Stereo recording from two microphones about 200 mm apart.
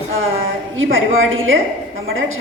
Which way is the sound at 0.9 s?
80° right.